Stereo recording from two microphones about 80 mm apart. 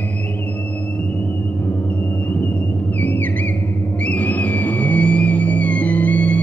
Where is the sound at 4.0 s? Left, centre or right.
Centre.